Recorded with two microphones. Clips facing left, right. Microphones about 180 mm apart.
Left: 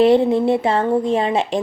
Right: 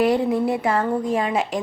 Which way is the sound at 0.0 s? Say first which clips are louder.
Left 5 dB; 25° left (ahead or behind).